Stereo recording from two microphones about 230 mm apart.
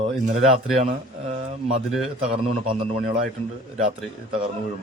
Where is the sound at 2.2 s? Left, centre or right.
Right.